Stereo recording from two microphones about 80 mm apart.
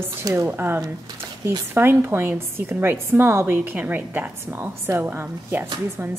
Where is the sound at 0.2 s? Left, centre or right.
Right.